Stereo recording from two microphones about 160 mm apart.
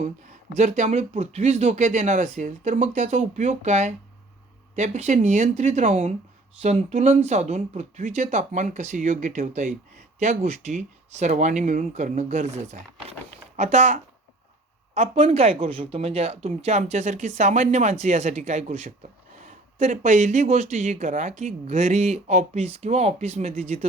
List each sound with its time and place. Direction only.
0.0 s speech: 50° right (ahead or behind)